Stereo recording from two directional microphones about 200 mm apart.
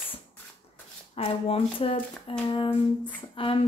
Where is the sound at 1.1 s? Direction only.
30° left (ahead or behind).